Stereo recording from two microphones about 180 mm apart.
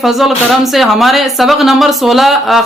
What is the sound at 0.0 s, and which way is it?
Speech, centre (ahead or behind).